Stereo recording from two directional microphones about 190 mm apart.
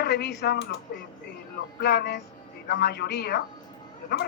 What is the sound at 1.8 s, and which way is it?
Speech, 60° left (ahead or behind).